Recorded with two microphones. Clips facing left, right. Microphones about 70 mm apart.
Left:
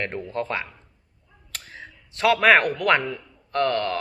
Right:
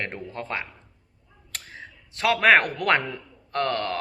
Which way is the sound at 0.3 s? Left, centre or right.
Right.